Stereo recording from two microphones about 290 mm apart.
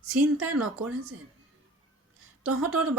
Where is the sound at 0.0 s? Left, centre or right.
Right.